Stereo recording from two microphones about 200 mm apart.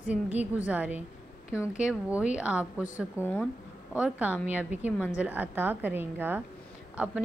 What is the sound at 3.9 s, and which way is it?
A woman's voice, 5° right (ahead or behind).